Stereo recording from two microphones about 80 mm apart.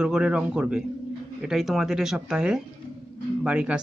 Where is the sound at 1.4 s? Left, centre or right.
Centre.